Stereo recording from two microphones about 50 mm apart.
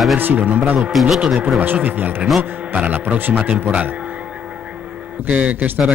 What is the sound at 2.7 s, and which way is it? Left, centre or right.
Speech, right.